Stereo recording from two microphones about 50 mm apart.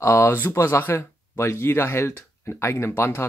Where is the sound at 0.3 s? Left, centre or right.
Left.